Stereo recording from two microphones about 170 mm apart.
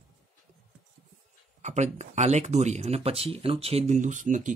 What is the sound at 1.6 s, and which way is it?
Speech, 45° right (ahead or behind).